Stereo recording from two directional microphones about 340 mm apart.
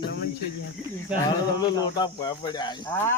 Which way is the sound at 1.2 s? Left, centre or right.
Centre.